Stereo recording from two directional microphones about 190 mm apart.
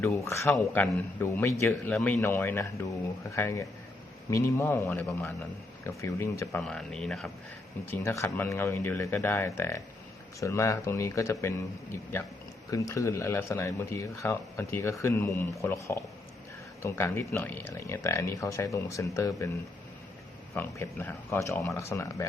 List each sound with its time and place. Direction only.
0.0 s speech: 15° left (ahead or behind)
6.7 s speech: 5° left (ahead or behind)
7.9 s speech: 15° left (ahead or behind)
12.7 s speech: 15° left (ahead or behind)
20.6 s speech: 10° left (ahead or behind)